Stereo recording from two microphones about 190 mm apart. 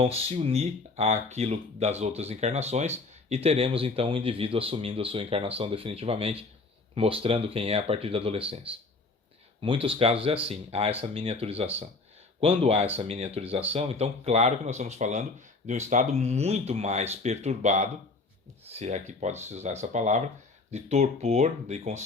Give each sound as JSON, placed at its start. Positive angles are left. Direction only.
{"t": 0.0, "sound": "speech", "side_deg": -30}